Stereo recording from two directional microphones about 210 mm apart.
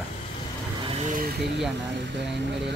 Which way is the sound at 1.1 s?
50° right (ahead or behind).